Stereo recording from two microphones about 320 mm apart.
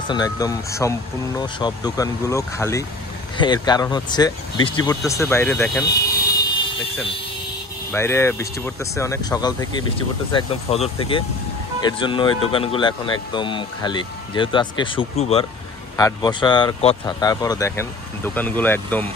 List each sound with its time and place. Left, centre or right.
0.1 s speech: centre
5.9 s speech: left
7.9 s speech: centre